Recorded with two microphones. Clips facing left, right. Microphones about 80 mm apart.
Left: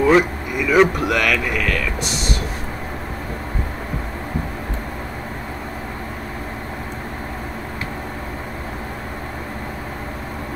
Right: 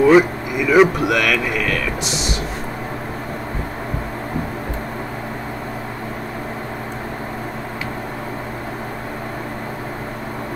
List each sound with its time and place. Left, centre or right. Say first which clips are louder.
0.0 s speech: right 3 dB; centre
2.0 s speech: right 1 dB; right